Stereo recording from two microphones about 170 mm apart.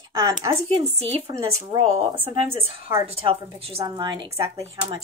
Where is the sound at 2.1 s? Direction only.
35° right (ahead or behind).